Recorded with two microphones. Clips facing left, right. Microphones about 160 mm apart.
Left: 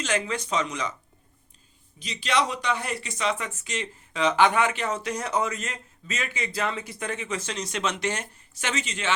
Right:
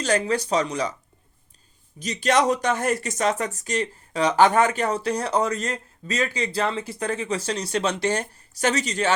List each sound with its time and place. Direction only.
0.0 s speech: 35° right (ahead or behind)
2.0 s speech: 45° right (ahead or behind)